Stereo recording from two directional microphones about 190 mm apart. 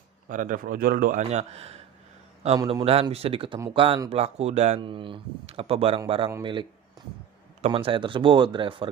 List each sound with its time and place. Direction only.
0.3 s a man's voice: 45° right (ahead or behind); by 8.8 s 25° right (ahead or behind)